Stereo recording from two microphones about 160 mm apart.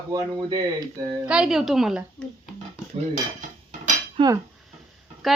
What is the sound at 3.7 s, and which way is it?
Dishes, 50° right (ahead or behind).